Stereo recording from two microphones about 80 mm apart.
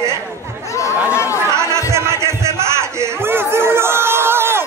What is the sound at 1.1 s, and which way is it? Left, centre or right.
Chatter, left.